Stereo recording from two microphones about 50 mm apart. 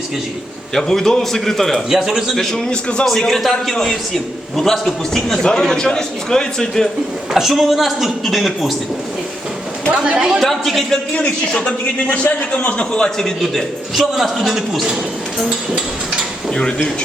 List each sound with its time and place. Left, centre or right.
0.7 s a man's voice: centre
1.9 s a woman's voice: centre
2.3 s a man's voice: centre
7.3 s a man's voice: centre
9.9 s a woman's voice: right
10.4 s a man's voice: centre
11.1 s a man's voice: left
13.1 s a man's voice: centre
16.6 s a man's voice: centre